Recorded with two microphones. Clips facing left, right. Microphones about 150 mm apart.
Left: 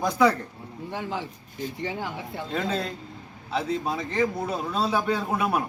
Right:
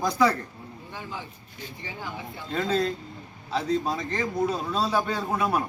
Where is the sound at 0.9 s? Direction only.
80° left.